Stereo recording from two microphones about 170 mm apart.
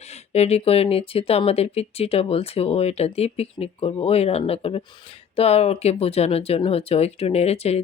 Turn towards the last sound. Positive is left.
turn(degrees=40)  # may be behind; listen again after turning